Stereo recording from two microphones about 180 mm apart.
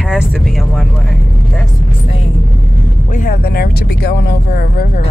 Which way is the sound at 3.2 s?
55° left (ahead or behind).